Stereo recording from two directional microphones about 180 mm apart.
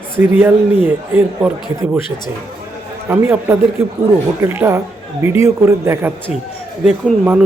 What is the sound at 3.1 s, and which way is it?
Speech, 10° right (ahead or behind).